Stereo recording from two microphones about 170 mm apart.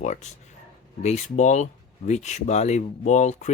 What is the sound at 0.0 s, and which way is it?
Speech, 45° left (ahead or behind).